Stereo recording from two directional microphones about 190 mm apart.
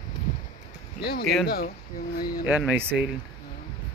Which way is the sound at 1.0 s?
55° left (ahead or behind).